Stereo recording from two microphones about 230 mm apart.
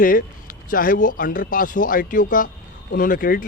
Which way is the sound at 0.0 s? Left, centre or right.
Left.